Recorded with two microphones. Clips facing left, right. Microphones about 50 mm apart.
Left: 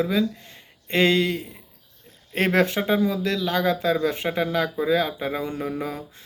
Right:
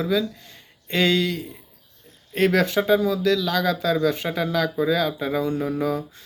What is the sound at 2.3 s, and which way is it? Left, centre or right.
Speech, left.